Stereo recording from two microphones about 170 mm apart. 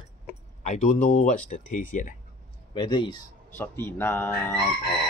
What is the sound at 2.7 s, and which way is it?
Speech, 30° left (ahead or behind).